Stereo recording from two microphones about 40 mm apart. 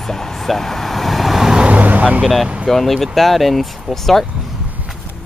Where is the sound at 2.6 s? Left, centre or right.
Centre.